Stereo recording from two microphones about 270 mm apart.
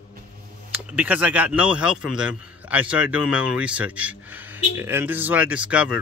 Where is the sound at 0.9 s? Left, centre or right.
Centre.